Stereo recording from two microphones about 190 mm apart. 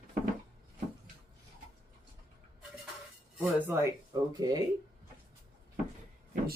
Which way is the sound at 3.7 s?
15° right (ahead or behind).